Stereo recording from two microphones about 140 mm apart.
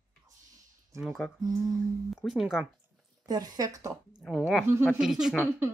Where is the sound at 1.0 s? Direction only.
5° left (ahead or behind).